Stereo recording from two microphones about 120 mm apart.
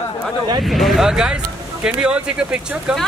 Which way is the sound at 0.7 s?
Centre (ahead or behind).